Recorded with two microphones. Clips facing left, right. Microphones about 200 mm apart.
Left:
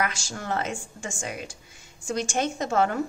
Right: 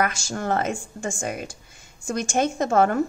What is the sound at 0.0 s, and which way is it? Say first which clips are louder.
A woman's voice: right 5 dB; 50° right (ahead or behind).